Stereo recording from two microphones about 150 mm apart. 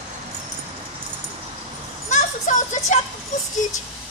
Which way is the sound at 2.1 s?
55° left (ahead or behind).